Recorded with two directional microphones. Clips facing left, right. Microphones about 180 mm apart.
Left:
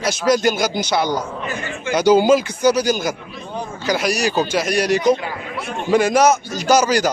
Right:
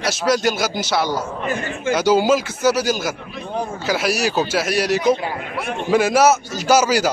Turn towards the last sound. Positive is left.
turn(degrees=-5)  # may be behind; listen again after turning